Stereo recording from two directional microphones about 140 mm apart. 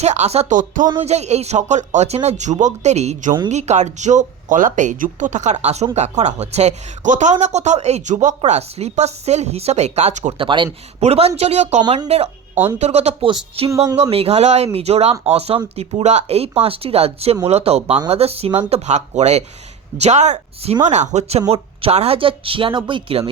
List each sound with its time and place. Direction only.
0.0 s speech: 55° right (ahead or behind)
1.0 s speech: 50° right (ahead or behind)
10.3 s speech: 35° right (ahead or behind)
11.0 s speech: 45° right (ahead or behind)